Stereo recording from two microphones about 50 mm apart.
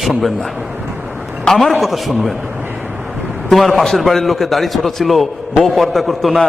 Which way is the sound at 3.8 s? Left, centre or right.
Centre.